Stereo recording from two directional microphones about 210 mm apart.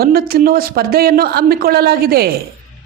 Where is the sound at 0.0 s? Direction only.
45° right (ahead or behind).